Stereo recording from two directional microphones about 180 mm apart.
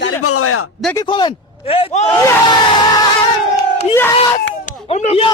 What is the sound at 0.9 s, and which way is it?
A man's voice, 25° left (ahead or behind).